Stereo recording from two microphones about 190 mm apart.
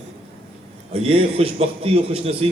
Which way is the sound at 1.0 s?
30° right (ahead or behind).